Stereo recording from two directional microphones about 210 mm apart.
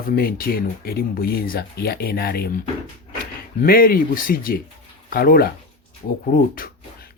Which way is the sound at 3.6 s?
45° left (ahead or behind).